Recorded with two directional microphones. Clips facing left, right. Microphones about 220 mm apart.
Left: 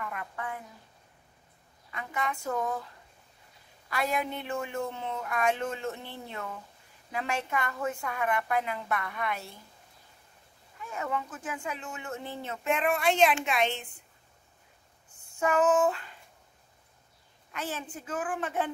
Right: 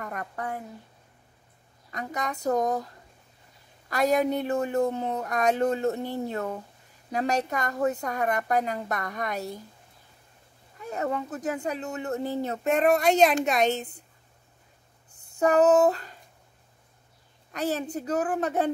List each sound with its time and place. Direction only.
0.0 s speech: 40° right (ahead or behind)
1.9 s speech: 40° right (ahead or behind)
3.9 s speech: 40° right (ahead or behind)
10.8 s speech: 40° right (ahead or behind)
15.1 s a sound: 40° right (ahead or behind)
17.5 s speech: 40° right (ahead or behind)